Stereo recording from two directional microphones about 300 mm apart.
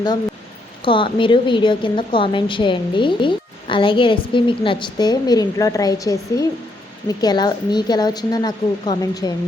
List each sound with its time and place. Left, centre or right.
0.9 s a woman's voice: centre